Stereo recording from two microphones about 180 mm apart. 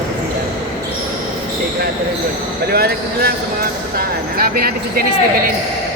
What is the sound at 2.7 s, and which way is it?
Speech, 60° right (ahead or behind).